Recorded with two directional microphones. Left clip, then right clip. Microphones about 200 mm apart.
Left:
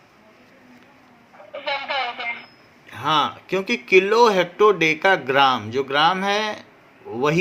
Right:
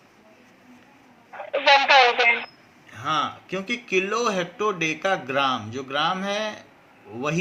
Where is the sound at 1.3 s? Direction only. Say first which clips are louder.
Right 10 dB; 40° right (ahead or behind).